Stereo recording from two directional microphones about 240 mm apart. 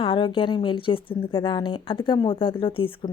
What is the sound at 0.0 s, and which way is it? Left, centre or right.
A woman's voice, left.